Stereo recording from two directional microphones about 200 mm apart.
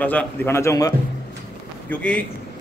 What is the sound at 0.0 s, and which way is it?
A man's voice, 10° left (ahead or behind).